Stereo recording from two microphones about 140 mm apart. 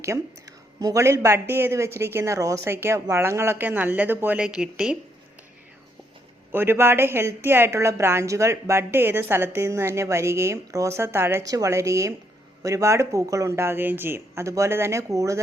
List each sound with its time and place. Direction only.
0.0 s speech: 25° right (ahead or behind); by 4.9 s 5° right (ahead or behind)
6.5 s a woman's voice: 15° right (ahead or behind)